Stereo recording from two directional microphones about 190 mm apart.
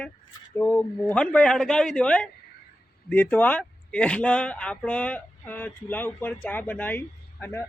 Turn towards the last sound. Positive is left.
turn(degrees=10)  # may be behind; listen again after turning